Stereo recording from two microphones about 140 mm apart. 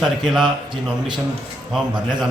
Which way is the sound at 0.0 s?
5° right (ahead or behind).